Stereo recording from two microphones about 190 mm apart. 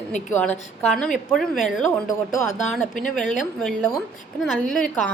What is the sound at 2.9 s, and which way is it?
Speech, 45° left (ahead or behind).